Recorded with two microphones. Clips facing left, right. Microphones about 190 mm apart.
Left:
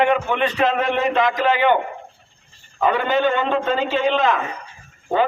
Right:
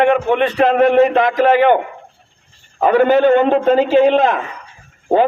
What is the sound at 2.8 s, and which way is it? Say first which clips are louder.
A man's voice: right 7 dB; 50° right (ahead or behind).